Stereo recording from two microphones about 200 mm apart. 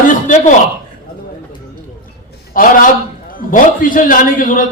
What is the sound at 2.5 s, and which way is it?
A man's voice, 45° left (ahead or behind).